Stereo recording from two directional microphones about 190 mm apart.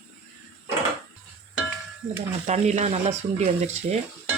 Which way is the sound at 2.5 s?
35° right (ahead or behind).